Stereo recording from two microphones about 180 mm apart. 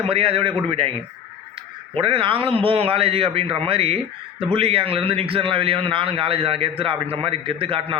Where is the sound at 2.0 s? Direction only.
30° right (ahead or behind).